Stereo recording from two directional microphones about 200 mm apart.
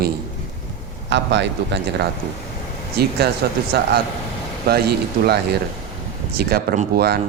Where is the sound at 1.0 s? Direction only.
60° right (ahead or behind).